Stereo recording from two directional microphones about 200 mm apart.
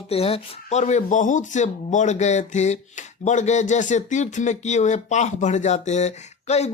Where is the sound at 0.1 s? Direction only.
30° left (ahead or behind).